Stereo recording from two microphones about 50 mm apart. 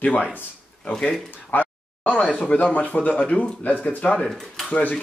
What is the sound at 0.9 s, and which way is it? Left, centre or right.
Speech, centre.